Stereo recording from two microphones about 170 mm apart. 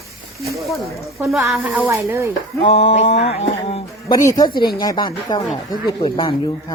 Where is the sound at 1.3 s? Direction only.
Centre (ahead or behind).